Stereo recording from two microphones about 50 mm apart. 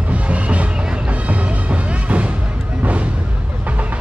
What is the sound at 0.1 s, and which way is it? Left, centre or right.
Music, right.